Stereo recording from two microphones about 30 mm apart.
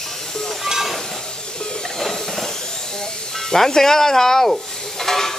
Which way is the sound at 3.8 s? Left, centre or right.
Centre.